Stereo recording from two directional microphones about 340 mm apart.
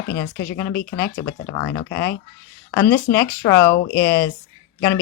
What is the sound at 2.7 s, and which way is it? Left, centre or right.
Speech, centre.